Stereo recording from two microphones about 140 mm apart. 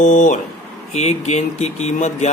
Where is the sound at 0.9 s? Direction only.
55° left (ahead or behind).